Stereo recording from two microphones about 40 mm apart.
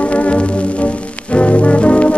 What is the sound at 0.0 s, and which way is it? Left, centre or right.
Music, left.